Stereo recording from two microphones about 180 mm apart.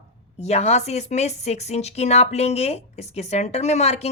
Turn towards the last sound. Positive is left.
turn(degrees=35)  # may be behind; listen again after turning